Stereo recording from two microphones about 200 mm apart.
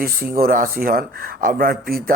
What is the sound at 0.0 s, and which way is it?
Speech, 50° right (ahead or behind).